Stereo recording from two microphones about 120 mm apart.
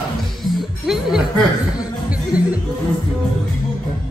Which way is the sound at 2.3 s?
10° right (ahead or behind).